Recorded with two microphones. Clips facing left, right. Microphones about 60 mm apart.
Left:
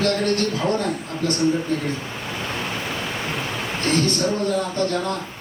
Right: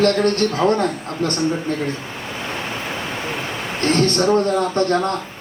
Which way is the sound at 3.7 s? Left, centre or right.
Right.